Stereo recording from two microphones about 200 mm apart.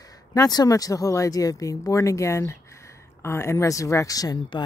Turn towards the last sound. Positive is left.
turn(degrees=20)  # may be behind; listen again after turning